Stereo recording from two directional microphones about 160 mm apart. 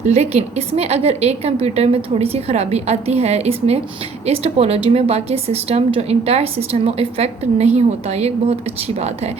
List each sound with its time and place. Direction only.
0.0 s a woman's voice: 45° right (ahead or behind)